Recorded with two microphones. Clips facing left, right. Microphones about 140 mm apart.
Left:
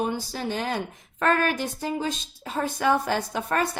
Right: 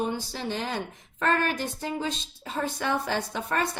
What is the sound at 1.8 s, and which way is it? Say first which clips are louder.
A woman's voice: left 3 dB; 40° left (ahead or behind).